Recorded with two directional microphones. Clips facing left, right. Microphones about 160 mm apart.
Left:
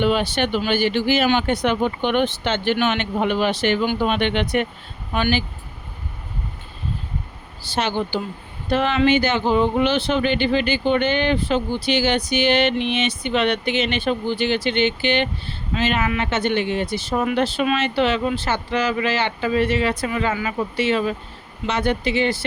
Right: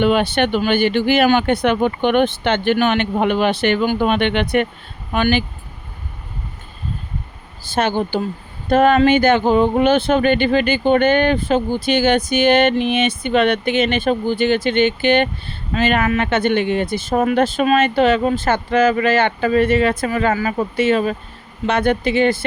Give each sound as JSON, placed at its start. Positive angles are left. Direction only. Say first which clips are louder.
{"t": 0.0, "sound": "speech", "louder": "right 4 dB", "side_deg": -60}
{"t": 7.6, "sound": "speech", "louder": "right 4 dB", "side_deg": -50}